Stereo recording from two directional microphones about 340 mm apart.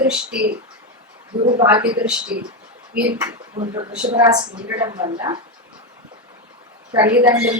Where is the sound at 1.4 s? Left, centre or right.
Centre.